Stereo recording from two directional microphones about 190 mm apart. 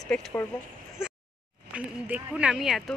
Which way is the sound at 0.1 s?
10° left (ahead or behind).